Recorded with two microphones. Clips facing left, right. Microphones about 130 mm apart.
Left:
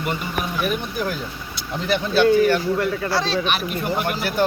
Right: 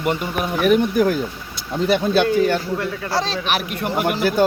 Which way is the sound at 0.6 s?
60° right (ahead or behind).